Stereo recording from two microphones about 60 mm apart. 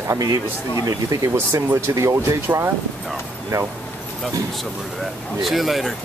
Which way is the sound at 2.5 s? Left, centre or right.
Right.